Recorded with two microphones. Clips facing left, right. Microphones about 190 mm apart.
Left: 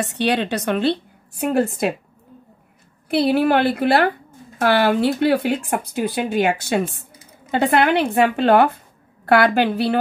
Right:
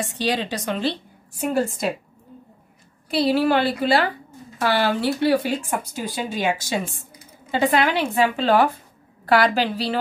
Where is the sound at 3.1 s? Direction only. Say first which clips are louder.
Left 2 dB; 55° left (ahead or behind).